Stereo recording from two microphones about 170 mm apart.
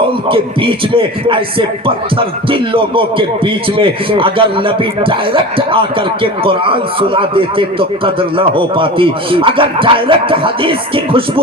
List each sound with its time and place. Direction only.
0.3 s speech: 30° right (ahead or behind)